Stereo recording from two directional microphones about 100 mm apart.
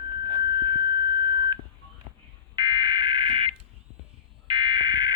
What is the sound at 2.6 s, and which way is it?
Fire alarm, 45° right (ahead or behind).